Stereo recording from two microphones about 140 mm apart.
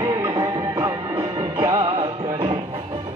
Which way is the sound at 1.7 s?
40° right (ahead or behind).